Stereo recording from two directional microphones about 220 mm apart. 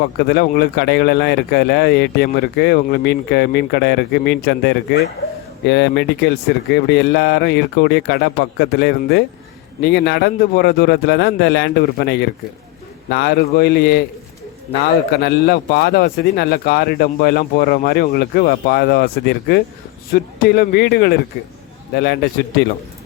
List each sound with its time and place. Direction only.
0.2 s a man's voice: 50° left (ahead or behind)